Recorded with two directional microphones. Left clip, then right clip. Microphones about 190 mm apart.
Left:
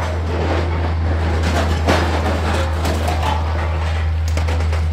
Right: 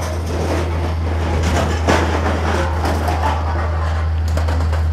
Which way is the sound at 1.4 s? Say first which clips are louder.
Right 1 dB; 60° left (ahead or behind).